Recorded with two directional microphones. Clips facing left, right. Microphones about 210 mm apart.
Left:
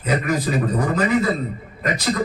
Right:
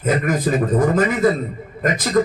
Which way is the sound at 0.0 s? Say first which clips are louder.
Right 3 dB; 50° right (ahead or behind).